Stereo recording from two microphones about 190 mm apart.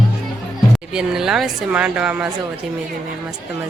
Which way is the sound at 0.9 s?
5° right (ahead or behind).